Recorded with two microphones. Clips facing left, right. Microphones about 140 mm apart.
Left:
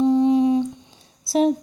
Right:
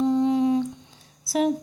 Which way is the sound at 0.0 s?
15° left (ahead or behind).